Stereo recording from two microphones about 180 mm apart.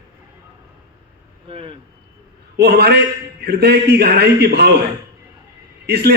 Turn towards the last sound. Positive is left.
turn(degrees=-65)  # may be behind; listen again after turning